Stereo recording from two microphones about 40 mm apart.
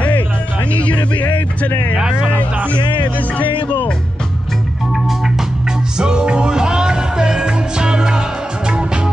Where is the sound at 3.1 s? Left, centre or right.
Left.